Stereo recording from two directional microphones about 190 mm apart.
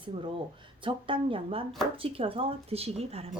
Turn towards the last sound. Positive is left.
turn(degrees=-30)  # may be behind; listen again after turning